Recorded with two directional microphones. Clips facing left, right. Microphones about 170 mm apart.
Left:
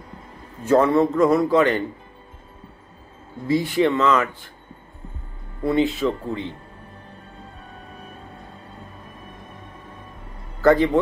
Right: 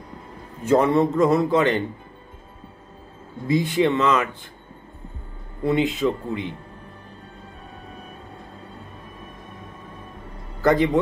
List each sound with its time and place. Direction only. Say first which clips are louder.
0.7 s a man's voice: left 1 dB; 20° right (ahead or behind)
3.4 s a man's voice: left 1 dB; 20° right (ahead or behind)
5.6 s a man's voice: left 1 dB; 20° right (ahead or behind)
10.6 s a man's voice: left 2 dB; 15° right (ahead or behind)